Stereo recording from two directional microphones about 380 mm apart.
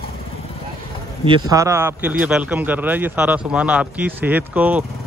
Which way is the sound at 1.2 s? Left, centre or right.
Centre.